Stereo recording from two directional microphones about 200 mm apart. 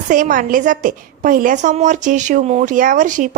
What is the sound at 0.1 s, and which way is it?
A woman's voice, 40° right (ahead or behind).